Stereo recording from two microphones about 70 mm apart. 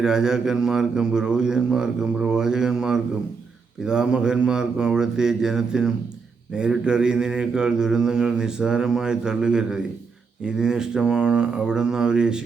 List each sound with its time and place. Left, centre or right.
0.0 s mantra: centre